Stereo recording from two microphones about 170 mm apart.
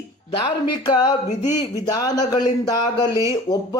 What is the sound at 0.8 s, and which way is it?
Speech, 25° left (ahead or behind).